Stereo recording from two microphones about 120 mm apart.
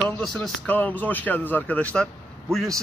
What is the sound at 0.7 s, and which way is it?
A man's voice, 15° left (ahead or behind).